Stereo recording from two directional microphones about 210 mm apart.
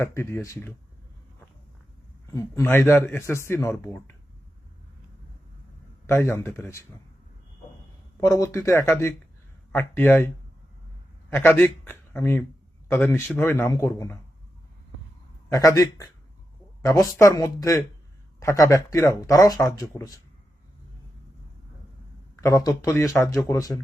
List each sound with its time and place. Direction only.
0.0 s speech: 10° left (ahead or behind)
2.3 s speech: 10° left (ahead or behind)
6.1 s speech: 10° left (ahead or behind)
8.4 s speech: 15° left (ahead or behind)
11.3 s a man's voice: 10° left (ahead or behind)
15.4 s speech: 15° left (ahead or behind)
22.4 s speech: 15° left (ahead or behind)